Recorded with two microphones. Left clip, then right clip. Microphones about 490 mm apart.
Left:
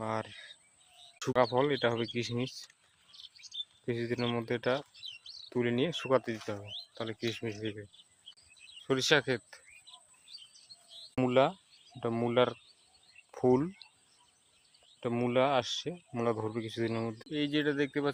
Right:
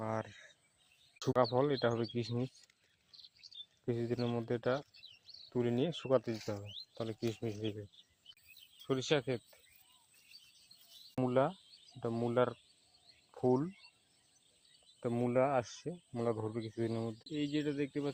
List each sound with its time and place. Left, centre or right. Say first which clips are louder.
0.0 s a sound: left 4 dB; right
1.2 s speech: left 3 dB; right
3.1 s chirp: left 7 dB; centre
3.8 s speech: left 3 dB; right
8.9 s speech: left 6 dB; right
11.2 s speech: left 5 dB; right
15.0 s speech: left 4 dB; right